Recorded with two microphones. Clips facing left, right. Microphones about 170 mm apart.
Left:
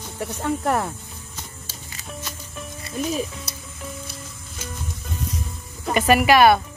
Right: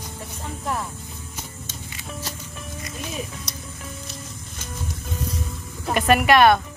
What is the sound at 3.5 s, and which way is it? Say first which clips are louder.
Music: right 1 dB; 5° left (ahead or behind).